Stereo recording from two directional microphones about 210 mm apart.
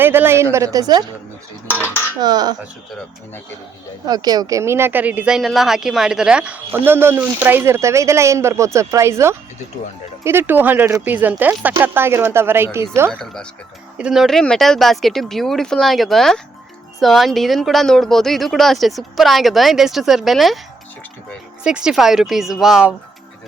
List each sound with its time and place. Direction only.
0.0 s speech: 10° right (ahead or behind)
2.2 s speech: 20° right (ahead or behind)
4.1 s speech: 20° right (ahead or behind)
13.1 s speech: 5° left (ahead or behind)
21.6 s speech: 5° right (ahead or behind)